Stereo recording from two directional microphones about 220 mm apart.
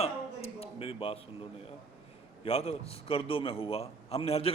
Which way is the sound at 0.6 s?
25° left (ahead or behind).